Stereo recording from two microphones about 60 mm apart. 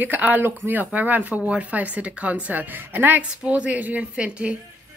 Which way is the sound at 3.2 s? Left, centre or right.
Centre.